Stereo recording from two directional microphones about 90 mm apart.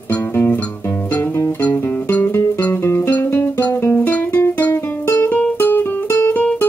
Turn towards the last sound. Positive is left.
turn(degrees=20)  # may be behind; listen again after turning